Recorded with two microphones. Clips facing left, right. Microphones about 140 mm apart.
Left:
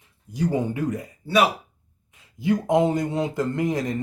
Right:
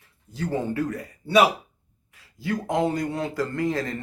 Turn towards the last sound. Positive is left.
turn(degrees=20)  # may be behind; listen again after turning